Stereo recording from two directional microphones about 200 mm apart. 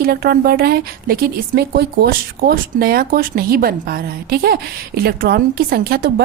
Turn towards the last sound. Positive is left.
turn(degrees=-50)  # may be behind; listen again after turning